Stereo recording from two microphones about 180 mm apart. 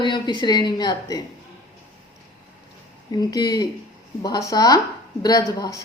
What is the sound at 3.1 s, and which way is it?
A woman's voice, 20° left (ahead or behind).